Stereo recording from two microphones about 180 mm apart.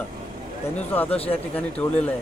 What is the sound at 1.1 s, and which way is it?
Speech, 35° left (ahead or behind).